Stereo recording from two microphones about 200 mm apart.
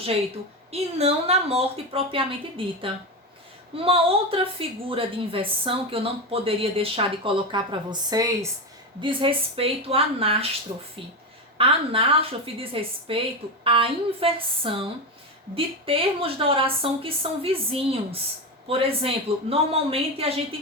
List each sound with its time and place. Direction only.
0.7 s a woman's voice: 30° right (ahead or behind)
11.5 s a woman's voice: 25° right (ahead or behind)